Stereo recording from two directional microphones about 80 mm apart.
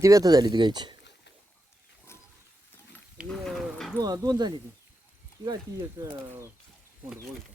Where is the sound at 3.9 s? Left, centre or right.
Right.